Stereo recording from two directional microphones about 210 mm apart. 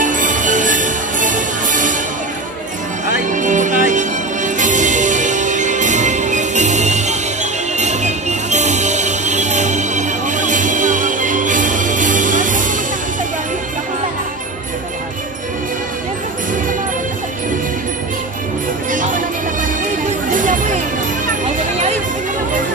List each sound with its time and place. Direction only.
0.0 s music: 40° right (ahead or behind)
3.3 s music: 35° right (ahead or behind)
18.9 s music: 40° right (ahead or behind)
20.3 s music: 40° right (ahead or behind)